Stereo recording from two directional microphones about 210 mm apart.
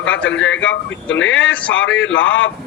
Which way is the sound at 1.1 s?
65° left (ahead or behind).